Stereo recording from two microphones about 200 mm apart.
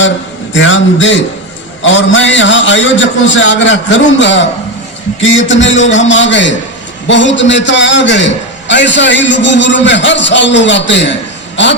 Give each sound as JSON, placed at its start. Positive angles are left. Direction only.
{"t": 0.5, "sound": "a man's voice", "side_deg": 70}